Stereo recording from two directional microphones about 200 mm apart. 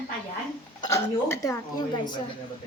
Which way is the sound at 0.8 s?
15° left (ahead or behind).